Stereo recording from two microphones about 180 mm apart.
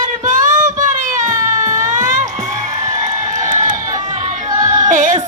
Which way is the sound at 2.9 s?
45° right (ahead or behind).